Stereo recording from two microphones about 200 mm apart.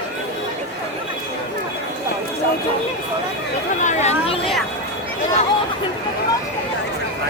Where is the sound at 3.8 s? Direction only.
35° left (ahead or behind).